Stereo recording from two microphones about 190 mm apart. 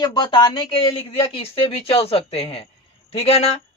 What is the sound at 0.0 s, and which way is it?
Speech, 25° left (ahead or behind).